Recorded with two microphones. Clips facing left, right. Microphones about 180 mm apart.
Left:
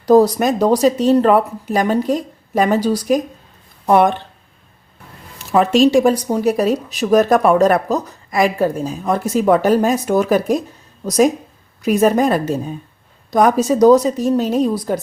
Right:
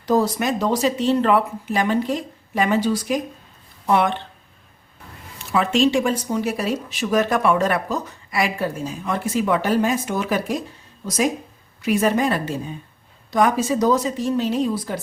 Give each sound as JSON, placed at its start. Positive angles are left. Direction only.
{"t": 0.0, "sound": "a woman's voice", "side_deg": 40}
{"t": 5.5, "sound": "a woman's voice", "side_deg": 40}